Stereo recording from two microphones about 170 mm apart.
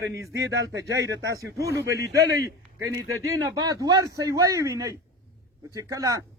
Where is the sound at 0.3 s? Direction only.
90° right.